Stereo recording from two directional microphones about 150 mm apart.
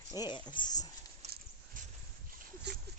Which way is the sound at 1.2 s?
50° right (ahead or behind).